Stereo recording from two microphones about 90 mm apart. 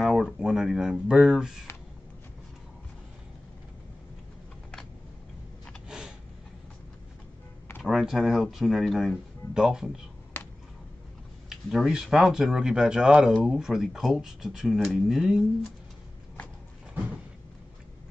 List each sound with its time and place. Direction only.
0.0 s speech: centre (ahead or behind)
5.9 s a sound: 5° right (ahead or behind)
7.8 s speech: 5° right (ahead or behind)
10.3 s finger snapping: 25° left (ahead or behind)
11.4 s speech: 5° right (ahead or behind)